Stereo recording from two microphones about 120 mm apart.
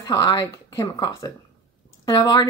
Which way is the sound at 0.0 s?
30° left (ahead or behind).